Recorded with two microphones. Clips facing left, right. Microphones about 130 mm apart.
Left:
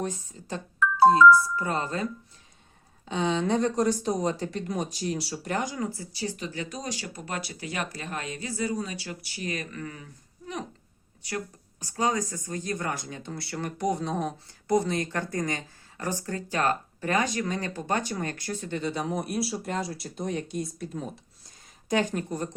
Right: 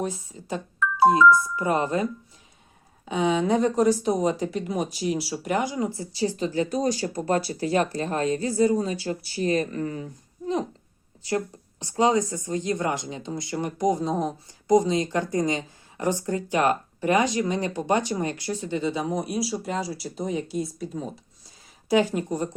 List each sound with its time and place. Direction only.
0.0 s speech: 10° right (ahead or behind)
3.1 s speech: 10° right (ahead or behind)
18.9 s speech: centre (ahead or behind)